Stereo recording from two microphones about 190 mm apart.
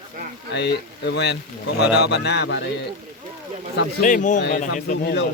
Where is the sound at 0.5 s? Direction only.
60° left (ahead or behind).